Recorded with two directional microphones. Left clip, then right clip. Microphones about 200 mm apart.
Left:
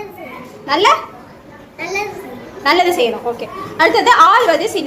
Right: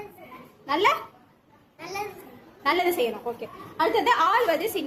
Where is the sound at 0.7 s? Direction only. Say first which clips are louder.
Left 10 dB; 20° right (ahead or behind).